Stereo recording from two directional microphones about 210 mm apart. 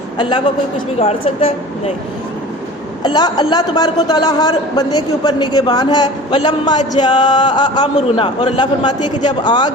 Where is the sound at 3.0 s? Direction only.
20° left (ahead or behind).